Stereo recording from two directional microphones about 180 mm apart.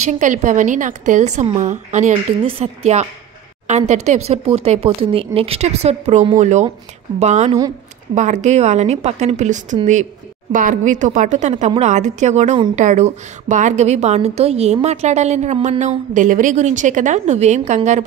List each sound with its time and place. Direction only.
0.0 s a woman's voice: 45° right (ahead or behind)